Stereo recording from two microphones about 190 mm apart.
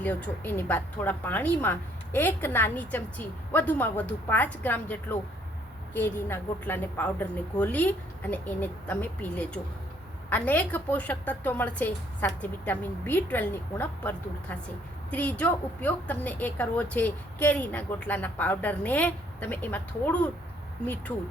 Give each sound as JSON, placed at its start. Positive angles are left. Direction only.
{"t": 0.0, "sound": "a woman's voice", "side_deg": 10}